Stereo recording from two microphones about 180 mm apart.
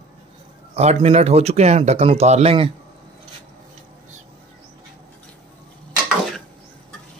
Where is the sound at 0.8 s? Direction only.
35° right (ahead or behind).